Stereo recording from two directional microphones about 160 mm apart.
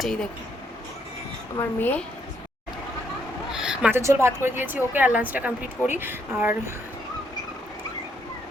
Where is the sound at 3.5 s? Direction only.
5° right (ahead or behind).